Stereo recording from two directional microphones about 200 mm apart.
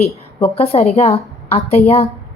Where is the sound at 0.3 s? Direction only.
30° left (ahead or behind).